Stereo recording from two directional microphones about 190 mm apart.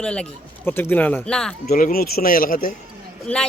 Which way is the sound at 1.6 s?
50° left (ahead or behind).